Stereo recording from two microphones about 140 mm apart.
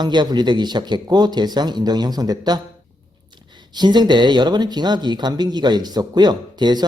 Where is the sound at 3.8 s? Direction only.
30° right (ahead or behind).